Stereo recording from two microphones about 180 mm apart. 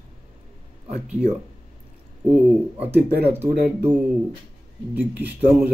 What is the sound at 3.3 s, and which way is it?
Speech, 10° right (ahead or behind).